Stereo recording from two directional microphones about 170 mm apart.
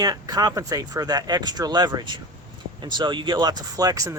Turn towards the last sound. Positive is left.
turn(degrees=-20)  # may be behind; listen again after turning